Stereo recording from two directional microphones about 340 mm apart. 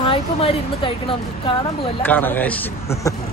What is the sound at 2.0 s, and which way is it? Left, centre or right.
A man's voice, centre.